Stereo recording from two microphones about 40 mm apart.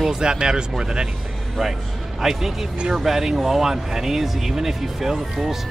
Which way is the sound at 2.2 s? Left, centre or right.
Centre.